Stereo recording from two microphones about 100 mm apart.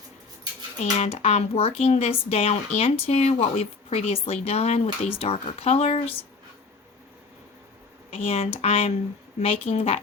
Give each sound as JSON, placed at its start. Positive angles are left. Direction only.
{"t": 0.8, "sound": "speech", "side_deg": 85}
{"t": 8.1, "sound": "a woman's voice", "side_deg": 75}
{"t": 8.6, "sound": "speech", "side_deg": 90}
{"t": 9.4, "sound": "a woman's voice", "side_deg": 70}